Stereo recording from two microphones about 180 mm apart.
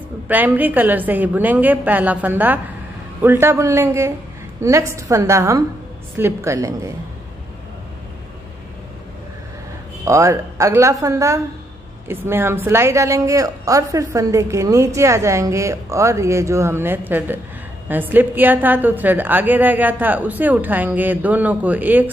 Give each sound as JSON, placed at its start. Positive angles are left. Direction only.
{"t": 0.3, "sound": "a woman's voice", "side_deg": -10}
{"t": 10.0, "sound": "a woman's voice", "side_deg": -15}